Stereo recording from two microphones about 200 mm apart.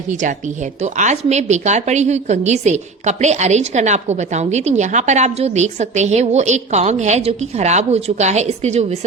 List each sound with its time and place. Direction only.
0.9 s a woman's voice: 35° right (ahead or behind)